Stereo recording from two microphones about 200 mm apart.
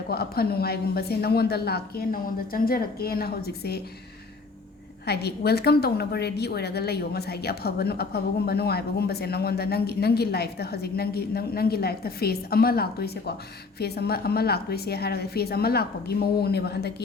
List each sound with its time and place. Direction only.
0.1 s a woman's voice: 50° left (ahead or behind)
5.0 s a woman's voice: 55° left (ahead or behind)